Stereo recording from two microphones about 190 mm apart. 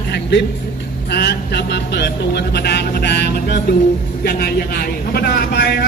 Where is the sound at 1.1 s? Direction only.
60° left (ahead or behind).